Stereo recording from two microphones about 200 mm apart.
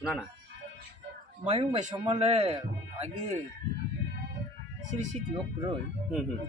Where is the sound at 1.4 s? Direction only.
25° right (ahead or behind).